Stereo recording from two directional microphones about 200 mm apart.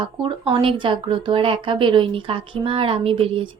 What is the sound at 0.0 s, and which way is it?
A woman's voice, 25° right (ahead or behind).